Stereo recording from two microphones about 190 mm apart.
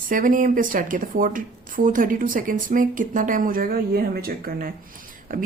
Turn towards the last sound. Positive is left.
turn(degrees=-45)  # may be behind; listen again after turning